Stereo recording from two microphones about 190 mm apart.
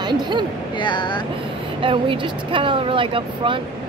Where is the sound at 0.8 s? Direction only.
25° left (ahead or behind).